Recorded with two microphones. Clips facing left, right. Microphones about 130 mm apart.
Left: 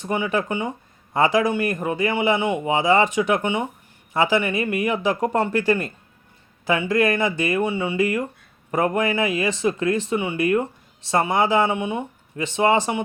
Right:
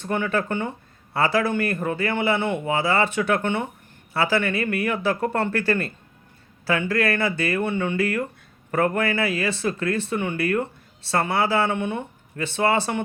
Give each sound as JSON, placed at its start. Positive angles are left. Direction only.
{"t": 0.0, "sound": "speech", "side_deg": 15}